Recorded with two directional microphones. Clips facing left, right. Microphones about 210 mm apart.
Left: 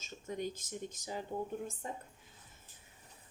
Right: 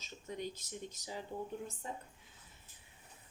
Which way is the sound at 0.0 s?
45° left (ahead or behind).